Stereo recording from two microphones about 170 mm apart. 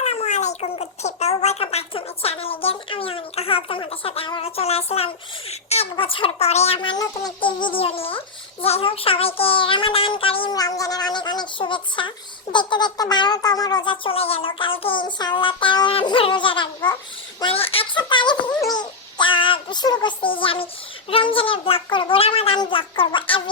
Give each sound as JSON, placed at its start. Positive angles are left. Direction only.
{"t": 0.0, "sound": "a child's voice", "side_deg": 40}
{"t": 17.4, "sound": "a sound", "side_deg": 35}
{"t": 21.1, "sound": "a child's voice", "side_deg": 30}